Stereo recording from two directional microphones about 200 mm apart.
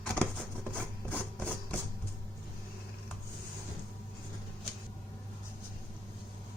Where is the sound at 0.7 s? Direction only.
5° left (ahead or behind).